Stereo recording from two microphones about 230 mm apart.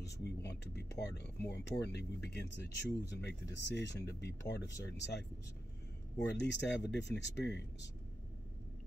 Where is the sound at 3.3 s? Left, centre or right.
Left.